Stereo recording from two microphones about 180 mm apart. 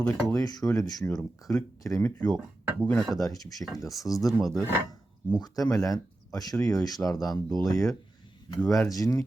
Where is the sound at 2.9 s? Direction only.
Centre (ahead or behind).